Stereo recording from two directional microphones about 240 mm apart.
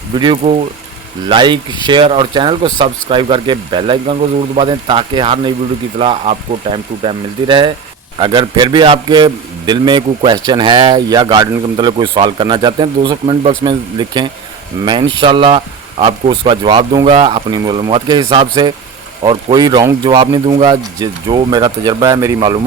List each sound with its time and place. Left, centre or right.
0.2 s a man's voice: right